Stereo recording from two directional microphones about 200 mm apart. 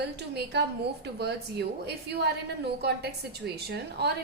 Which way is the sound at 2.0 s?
55° right (ahead or behind).